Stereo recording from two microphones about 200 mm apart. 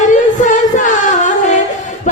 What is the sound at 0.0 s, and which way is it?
Music, 40° left (ahead or behind).